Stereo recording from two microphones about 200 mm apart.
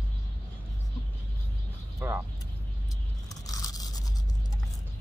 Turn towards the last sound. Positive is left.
turn(degrees=20)  # may be behind; listen again after turning